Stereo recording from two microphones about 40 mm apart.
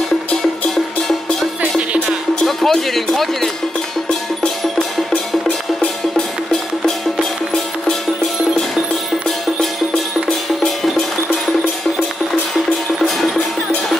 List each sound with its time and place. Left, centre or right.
1.6 s music: right
2.4 s speech: centre
13.0 s music: centre